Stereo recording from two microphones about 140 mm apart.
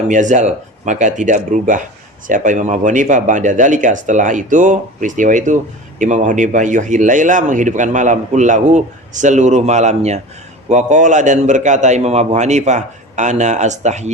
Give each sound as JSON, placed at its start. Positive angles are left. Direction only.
{"t": 0.1, "sound": "speech", "side_deg": -60}